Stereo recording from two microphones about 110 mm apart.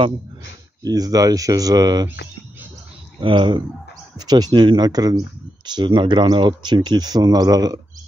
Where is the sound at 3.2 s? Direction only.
50° right (ahead or behind).